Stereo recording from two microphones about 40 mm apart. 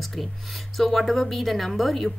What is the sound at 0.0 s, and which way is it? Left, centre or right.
Speech, centre.